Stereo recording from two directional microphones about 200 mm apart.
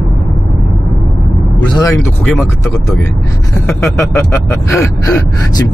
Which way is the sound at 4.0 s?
10° left (ahead or behind).